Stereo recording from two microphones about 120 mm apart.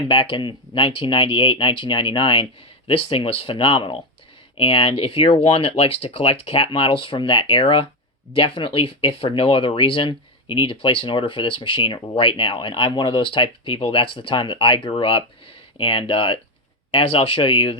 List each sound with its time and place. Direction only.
0.1 s speech: 45° left (ahead or behind)